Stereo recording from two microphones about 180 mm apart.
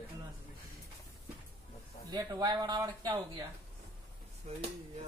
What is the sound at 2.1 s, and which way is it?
Speech, 20° right (ahead or behind).